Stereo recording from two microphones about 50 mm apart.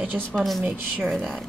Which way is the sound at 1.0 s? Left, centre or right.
Centre.